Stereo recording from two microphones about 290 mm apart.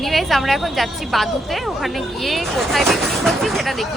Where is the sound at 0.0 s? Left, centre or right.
Centre.